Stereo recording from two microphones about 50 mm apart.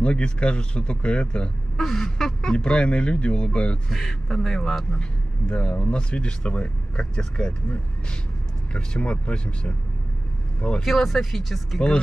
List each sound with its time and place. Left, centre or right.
0.0 s speech: left
1.8 s duck: centre
2.5 s speech: centre
3.9 s speech: centre
10.8 s speech: centre